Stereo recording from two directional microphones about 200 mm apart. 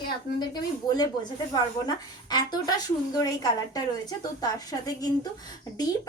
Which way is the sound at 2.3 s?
20° left (ahead or behind).